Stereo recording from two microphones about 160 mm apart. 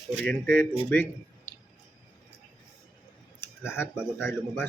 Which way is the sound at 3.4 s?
15° left (ahead or behind).